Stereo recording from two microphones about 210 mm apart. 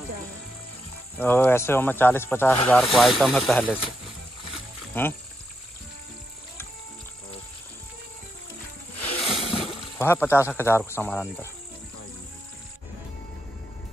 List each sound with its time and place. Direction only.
1.2 s speech: 10° left (ahead or behind)
4.9 s speech: 10° left (ahead or behind)
9.2 s a sound: 25° left (ahead or behind)
9.9 s speech: 10° left (ahead or behind)